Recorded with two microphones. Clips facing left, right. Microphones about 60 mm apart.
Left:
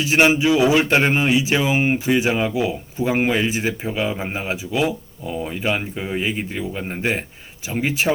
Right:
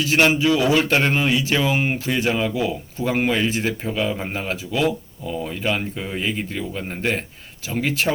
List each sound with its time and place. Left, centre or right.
0.0 s speech: centre